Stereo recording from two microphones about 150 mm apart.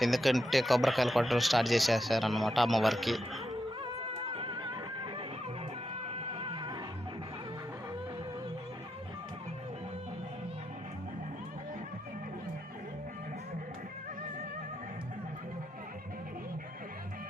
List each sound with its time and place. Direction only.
0.0 s speech: centre (ahead or behind)
3.9 s music: 40° right (ahead or behind)